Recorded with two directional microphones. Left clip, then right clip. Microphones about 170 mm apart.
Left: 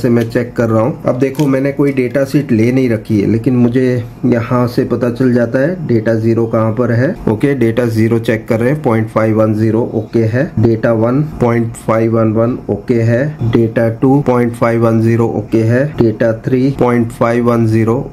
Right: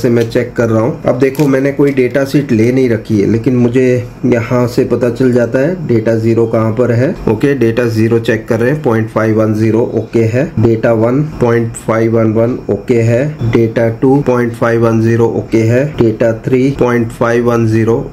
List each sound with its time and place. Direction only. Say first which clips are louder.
0.3 s speech: right 2 dB; 25° left (ahead or behind)
3.6 s speech: right 3 dB; 10° left (ahead or behind)
7.4 s speech: right 1 dB; 25° left (ahead or behind)
11.4 s speech: right 2 dB; 25° left (ahead or behind)
12.4 s speech: right 2 dB; 10° left (ahead or behind)
13.7 s speech: right 1 dB; 25° left (ahead or behind)
15.6 s speech: right 1 dB; 15° left (ahead or behind)
16.7 s speech: right 1 dB; 25° left (ahead or behind)